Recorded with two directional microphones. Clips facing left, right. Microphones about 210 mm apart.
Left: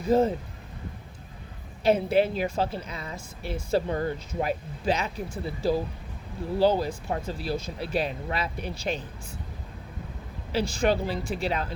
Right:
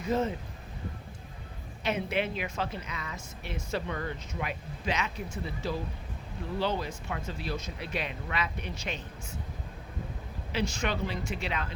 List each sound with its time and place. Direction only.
0.0 s a woman's voice: 35° left (ahead or behind)
1.8 s a woman's voice: 35° left (ahead or behind)
10.5 s a woman's voice: 35° left (ahead or behind)